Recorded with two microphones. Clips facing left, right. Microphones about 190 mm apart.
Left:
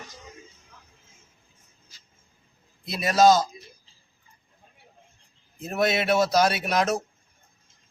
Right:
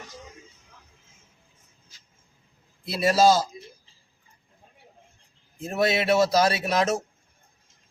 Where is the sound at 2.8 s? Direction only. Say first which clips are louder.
Right 1 dB; 30° right (ahead or behind).